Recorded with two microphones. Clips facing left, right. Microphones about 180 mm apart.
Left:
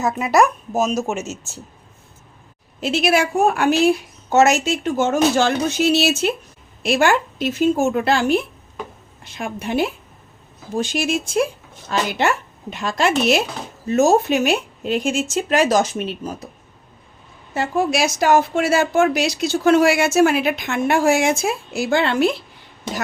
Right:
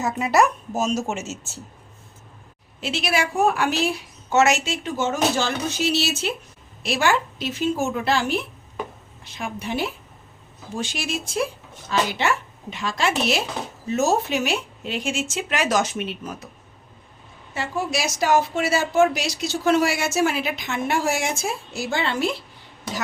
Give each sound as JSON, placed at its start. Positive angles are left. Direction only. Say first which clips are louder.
{"t": 0.0, "sound": "a woman's voice", "louder": "left 3 dB", "side_deg": 15}
{"t": 2.8, "sound": "speech", "louder": "left 6 dB", "side_deg": 45}
{"t": 4.3, "sound": "speech", "louder": "left 4 dB", "side_deg": 35}
{"t": 10.8, "sound": "speech", "louder": "left 7 dB", "side_deg": 45}
{"t": 17.5, "sound": "speech", "louder": "left 6 dB", "side_deg": 50}